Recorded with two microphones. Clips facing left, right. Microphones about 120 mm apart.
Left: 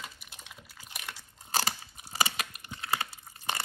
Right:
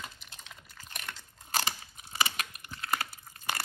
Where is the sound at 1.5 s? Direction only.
35° left (ahead or behind).